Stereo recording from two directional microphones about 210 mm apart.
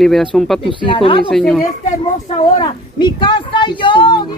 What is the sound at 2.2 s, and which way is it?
A woman's voice, 25° left (ahead or behind).